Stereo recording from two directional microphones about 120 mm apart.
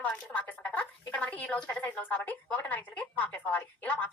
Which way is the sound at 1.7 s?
10° left (ahead or behind).